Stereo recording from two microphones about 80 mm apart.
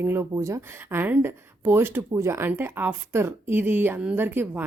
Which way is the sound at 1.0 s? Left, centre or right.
Right.